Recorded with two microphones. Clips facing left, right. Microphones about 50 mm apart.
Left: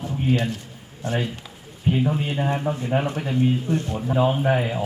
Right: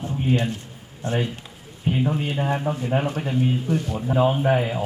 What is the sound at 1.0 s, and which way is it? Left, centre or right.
Speech, right.